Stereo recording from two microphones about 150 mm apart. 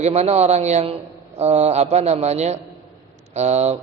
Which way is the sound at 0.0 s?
45° right (ahead or behind).